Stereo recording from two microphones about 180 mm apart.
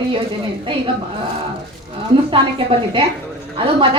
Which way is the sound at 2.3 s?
30° right (ahead or behind).